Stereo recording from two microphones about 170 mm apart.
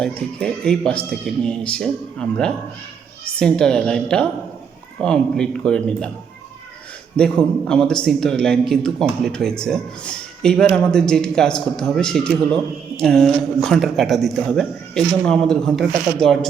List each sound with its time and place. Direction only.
0.3 s a man's voice: 5° left (ahead or behind)
7.2 s a man's voice: 5° left (ahead or behind)